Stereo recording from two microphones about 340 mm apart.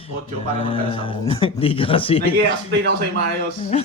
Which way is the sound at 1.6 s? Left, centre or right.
Centre.